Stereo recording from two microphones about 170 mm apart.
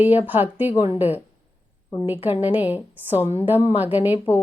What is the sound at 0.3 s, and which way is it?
Speech, 10° right (ahead or behind).